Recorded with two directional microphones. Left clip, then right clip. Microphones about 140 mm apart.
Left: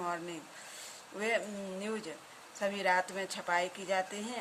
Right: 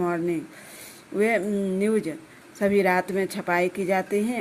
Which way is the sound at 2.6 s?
45° right (ahead or behind).